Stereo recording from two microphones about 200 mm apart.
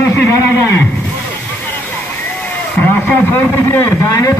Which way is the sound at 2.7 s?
10° left (ahead or behind).